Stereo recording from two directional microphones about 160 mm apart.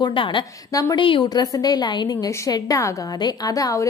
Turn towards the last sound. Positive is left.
turn(degrees=20)  # may be behind; listen again after turning